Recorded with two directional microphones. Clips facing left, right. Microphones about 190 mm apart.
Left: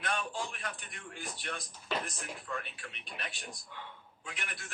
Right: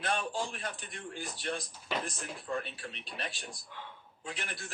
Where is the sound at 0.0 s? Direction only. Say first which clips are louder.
Right 3 dB; 30° right (ahead or behind).